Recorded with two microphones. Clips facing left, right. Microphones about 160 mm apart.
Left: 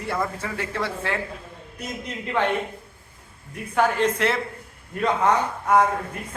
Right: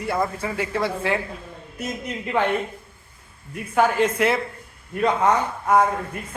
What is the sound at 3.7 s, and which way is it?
Speech, 5° right (ahead or behind).